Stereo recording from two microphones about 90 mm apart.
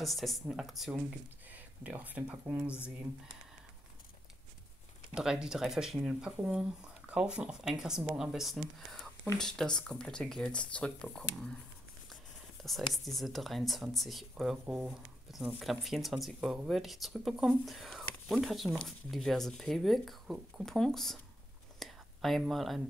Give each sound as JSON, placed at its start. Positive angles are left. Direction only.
{"t": 0.0, "sound": "speech", "side_deg": 0}
{"t": 1.5, "sound": "speech", "side_deg": -15}
{"t": 5.1, "sound": "speech", "side_deg": -10}
{"t": 12.6, "sound": "speech", "side_deg": 0}
{"t": 21.7, "sound": "whispering", "side_deg": 0}